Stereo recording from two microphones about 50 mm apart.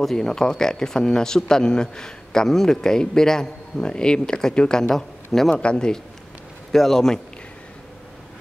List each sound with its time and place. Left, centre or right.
0.0 s speech: centre
5.6 s a man's voice: centre
6.7 s speech: centre